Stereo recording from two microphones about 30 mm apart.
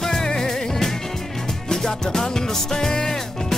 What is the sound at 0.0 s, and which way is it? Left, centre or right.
Music, centre.